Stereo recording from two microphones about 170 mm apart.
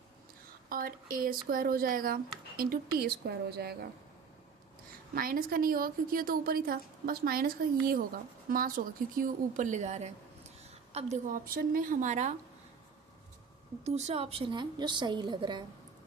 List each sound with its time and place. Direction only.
0.7 s a woman's voice: 55° right (ahead or behind)
5.1 s a woman's voice: 55° right (ahead or behind); by 11.3 s 40° right (ahead or behind)
11.4 s a woman's voice: 55° right (ahead or behind)
13.8 s a woman's voice: 40° right (ahead or behind)